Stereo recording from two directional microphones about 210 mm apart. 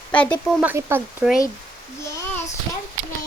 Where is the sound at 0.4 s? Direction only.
10° right (ahead or behind).